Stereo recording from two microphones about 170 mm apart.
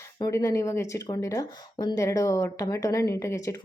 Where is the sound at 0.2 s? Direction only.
20° left (ahead or behind).